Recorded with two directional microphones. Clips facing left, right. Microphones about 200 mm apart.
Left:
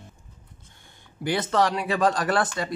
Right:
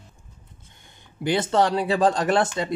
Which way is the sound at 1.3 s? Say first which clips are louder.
Right 2 dB; 25° right (ahead or behind).